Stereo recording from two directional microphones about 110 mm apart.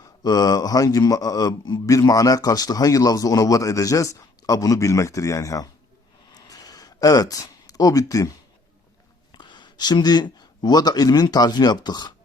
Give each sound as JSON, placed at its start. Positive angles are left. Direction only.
{"t": 0.0, "sound": "speech", "side_deg": 35}
{"t": 6.3, "sound": "a sound", "side_deg": 35}
{"t": 9.3, "sound": "speech", "side_deg": 45}